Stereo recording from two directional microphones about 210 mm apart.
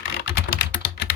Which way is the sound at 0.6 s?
50° left (ahead or behind).